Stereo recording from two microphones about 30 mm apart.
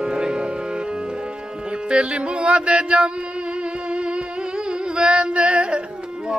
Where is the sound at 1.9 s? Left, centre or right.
Right.